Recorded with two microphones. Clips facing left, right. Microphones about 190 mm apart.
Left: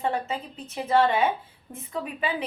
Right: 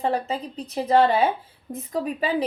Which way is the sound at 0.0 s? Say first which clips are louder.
Right 3 dB; 35° right (ahead or behind).